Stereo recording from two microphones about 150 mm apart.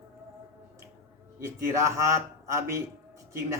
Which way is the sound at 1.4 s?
20° right (ahead or behind).